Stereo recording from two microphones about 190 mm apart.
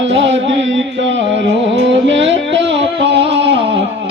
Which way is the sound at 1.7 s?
70° right (ahead or behind).